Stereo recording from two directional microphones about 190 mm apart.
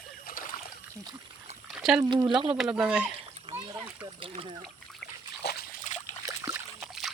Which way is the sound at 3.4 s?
35° right (ahead or behind).